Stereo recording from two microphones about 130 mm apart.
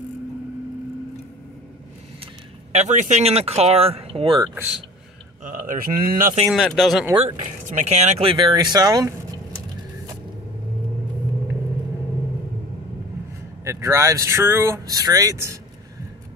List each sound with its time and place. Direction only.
2.7 s speech: 65° right (ahead or behind); by 4.4 s 45° right (ahead or behind)
5.4 s speech: 90° right
6.4 s speech: centre (ahead or behind)
7.3 s speech: 80° right; by 9.1 s 30° right (ahead or behind)
13.7 s speech: 20° right (ahead or behind)